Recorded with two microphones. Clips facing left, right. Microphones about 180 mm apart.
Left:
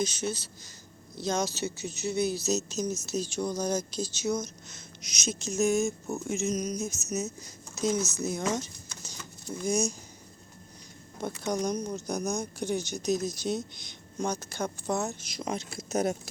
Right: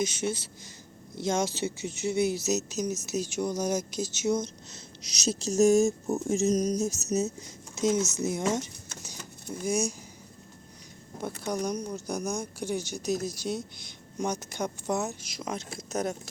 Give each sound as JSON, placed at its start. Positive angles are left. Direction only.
{"t": 0.0, "sound": "speech", "side_deg": -25}
{"t": 6.2, "sound": "a sound", "side_deg": -40}
{"t": 7.4, "sound": "speech", "side_deg": -20}
{"t": 9.6, "sound": "speech", "side_deg": -10}
{"t": 11.4, "sound": "speech", "side_deg": -10}
{"t": 14.2, "sound": "speech", "side_deg": -20}
{"t": 15.0, "sound": "speech", "side_deg": 0}